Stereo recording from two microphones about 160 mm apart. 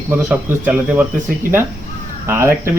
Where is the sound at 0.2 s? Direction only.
15° right (ahead or behind).